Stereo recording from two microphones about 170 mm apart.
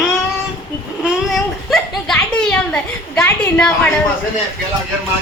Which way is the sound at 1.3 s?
5° left (ahead or behind).